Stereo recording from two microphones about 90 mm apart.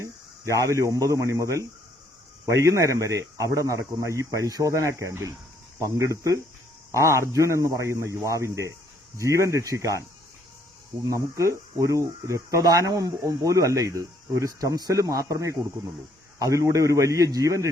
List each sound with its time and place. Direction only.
0.0 s speech: 35° right (ahead or behind)
11.0 s speech: 40° right (ahead or behind)